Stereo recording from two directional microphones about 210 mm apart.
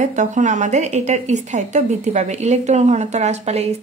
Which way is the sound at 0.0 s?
35° right (ahead or behind).